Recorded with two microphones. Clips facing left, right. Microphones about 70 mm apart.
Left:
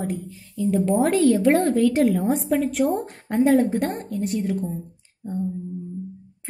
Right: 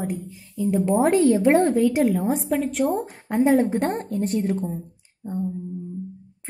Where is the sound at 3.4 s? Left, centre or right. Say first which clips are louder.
Even; right.